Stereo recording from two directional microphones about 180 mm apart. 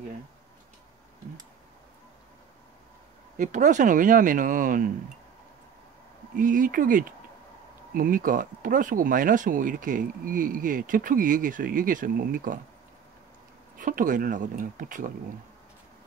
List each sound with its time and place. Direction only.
3.3 s speech: 45° right (ahead or behind)
6.3 s speech: 45° right (ahead or behind)
13.7 s speech: 50° right (ahead or behind)